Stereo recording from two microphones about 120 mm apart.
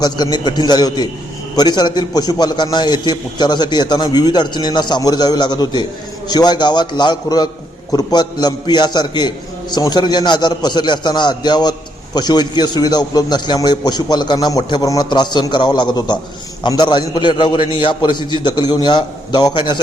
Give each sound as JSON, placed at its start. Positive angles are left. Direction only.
{"t": 0.0, "sound": "a man's voice", "side_deg": 35}